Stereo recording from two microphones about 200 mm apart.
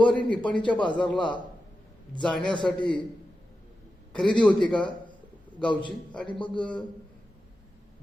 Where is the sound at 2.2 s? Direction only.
5° left (ahead or behind).